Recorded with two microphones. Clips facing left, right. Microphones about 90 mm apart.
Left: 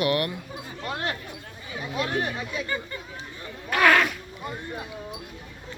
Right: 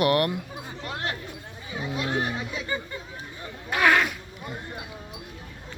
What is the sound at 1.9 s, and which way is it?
Speech, 20° right (ahead or behind).